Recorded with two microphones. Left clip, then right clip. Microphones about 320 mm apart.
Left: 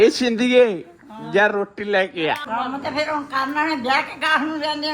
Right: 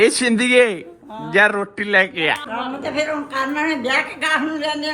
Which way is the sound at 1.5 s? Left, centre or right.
Right.